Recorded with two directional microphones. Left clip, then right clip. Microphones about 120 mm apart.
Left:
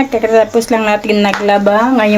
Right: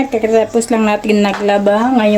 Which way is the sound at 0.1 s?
15° right (ahead or behind).